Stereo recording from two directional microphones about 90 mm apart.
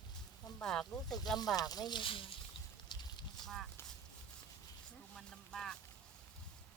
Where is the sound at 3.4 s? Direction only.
5° left (ahead or behind).